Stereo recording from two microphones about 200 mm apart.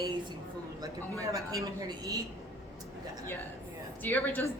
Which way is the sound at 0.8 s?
15° right (ahead or behind).